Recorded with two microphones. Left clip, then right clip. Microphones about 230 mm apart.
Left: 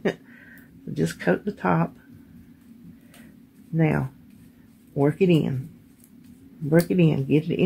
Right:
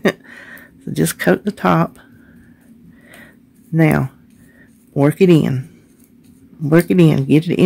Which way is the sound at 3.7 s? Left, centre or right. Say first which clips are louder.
Right 9 dB; right.